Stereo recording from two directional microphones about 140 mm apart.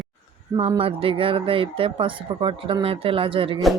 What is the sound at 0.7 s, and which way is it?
Speech, 40° right (ahead or behind).